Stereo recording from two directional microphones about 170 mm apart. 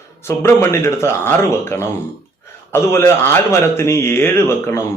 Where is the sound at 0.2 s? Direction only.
15° left (ahead or behind).